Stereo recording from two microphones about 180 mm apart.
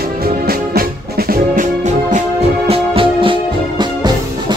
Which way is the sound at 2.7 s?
30° right (ahead or behind).